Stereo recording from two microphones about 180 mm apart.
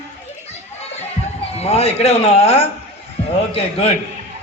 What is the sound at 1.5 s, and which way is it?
A child's voice, 35° left (ahead or behind).